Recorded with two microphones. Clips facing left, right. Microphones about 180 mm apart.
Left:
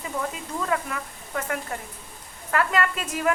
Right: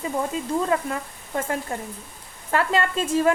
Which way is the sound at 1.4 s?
30° right (ahead or behind).